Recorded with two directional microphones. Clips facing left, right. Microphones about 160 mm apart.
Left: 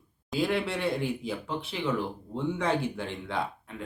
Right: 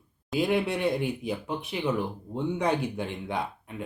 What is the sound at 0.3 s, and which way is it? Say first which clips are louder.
Speech: right 2 dB; 15° right (ahead or behind).